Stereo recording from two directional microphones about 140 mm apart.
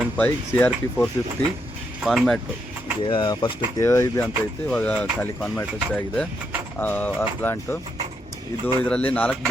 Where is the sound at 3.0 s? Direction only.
35° left (ahead or behind).